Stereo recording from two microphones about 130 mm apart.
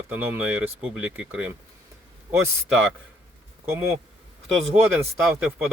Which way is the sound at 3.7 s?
20° right (ahead or behind).